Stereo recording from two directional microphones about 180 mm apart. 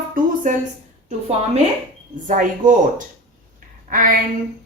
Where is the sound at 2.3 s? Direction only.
45° right (ahead or behind).